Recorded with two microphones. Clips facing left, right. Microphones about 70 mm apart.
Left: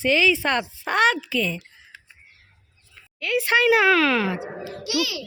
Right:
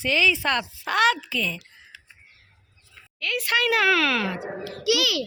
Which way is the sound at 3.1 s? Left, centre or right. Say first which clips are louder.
Left 4 dB; centre.